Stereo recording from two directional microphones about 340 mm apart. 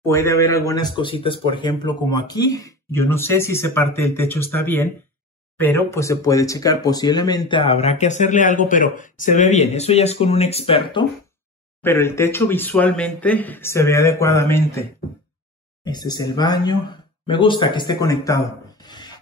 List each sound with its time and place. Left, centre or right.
0.0 s speech: centre